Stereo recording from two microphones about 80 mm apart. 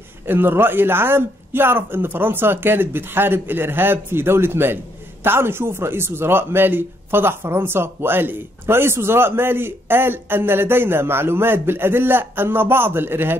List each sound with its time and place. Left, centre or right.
0.3 s speech: right